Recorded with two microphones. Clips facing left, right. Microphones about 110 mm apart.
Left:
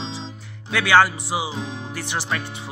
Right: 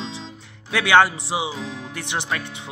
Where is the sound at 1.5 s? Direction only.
25° left (ahead or behind).